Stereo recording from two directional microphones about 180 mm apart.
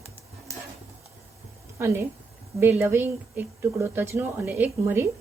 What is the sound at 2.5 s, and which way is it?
Speech, 10° right (ahead or behind).